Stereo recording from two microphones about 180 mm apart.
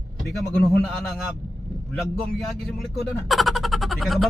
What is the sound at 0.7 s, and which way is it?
Speech, centre (ahead or behind).